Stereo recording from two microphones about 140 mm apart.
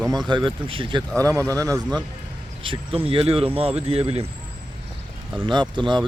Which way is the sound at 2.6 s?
40° right (ahead or behind).